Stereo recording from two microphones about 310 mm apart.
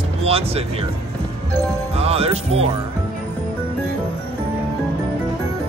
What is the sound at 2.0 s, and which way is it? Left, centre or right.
Music, centre.